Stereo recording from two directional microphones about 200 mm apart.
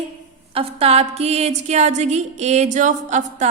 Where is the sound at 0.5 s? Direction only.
30° right (ahead or behind).